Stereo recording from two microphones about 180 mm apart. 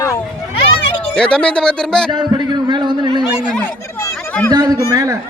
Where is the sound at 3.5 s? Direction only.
5° left (ahead or behind).